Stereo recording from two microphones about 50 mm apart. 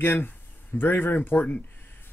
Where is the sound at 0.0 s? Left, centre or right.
Left.